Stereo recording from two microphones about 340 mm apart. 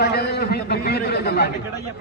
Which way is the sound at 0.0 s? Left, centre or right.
Left.